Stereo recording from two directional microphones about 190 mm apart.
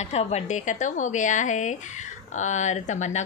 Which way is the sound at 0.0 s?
35° left (ahead or behind).